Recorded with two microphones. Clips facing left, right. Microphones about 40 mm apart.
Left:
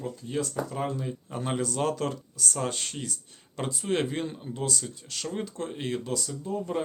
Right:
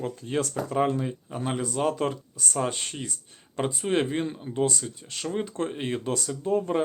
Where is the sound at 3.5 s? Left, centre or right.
Right.